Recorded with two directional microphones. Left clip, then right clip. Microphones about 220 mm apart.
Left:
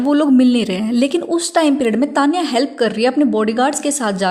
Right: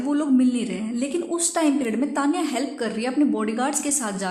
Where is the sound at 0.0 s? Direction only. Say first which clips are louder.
Left 8 dB; 35° left (ahead or behind).